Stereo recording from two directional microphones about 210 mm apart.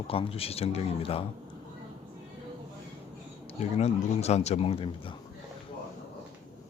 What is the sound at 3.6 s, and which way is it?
A man's voice, 30° left (ahead or behind).